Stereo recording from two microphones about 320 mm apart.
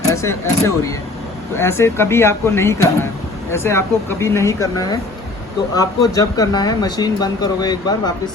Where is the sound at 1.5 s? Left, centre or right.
Centre.